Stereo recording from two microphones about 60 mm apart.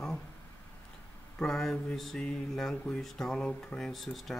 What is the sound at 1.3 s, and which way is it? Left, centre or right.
Speech, centre.